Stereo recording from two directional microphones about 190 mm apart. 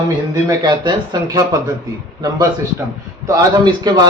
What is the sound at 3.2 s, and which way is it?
Speech, 20° right (ahead or behind).